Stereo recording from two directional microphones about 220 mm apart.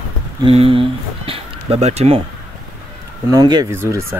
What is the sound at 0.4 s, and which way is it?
Speech, 25° right (ahead or behind).